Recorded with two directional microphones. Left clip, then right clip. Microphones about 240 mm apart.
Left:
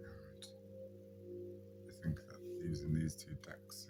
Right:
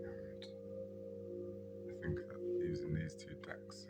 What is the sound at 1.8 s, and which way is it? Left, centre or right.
Music, centre.